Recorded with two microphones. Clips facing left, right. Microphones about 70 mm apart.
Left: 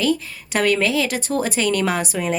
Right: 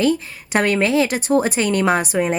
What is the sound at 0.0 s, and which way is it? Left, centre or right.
Speech, right.